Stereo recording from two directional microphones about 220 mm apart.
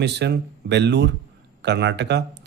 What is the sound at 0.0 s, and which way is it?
Speech, 50° right (ahead or behind).